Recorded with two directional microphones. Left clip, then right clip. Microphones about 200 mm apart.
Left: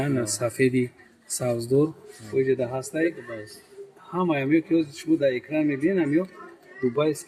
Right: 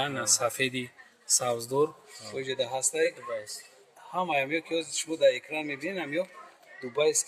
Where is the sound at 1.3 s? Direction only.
20° right (ahead or behind).